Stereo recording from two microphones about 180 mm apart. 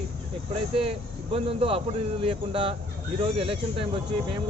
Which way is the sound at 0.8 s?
30° right (ahead or behind).